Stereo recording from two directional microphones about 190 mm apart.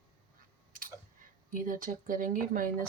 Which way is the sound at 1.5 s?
45° right (ahead or behind).